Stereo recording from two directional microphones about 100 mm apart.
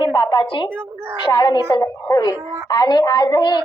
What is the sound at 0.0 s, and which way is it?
A woman's voice, 50° left (ahead or behind).